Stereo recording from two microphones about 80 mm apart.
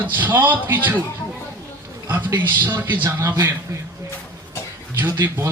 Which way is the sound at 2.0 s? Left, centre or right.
Right.